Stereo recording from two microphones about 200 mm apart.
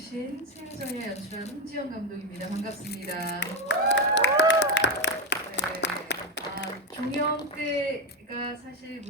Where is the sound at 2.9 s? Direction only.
50° left (ahead or behind).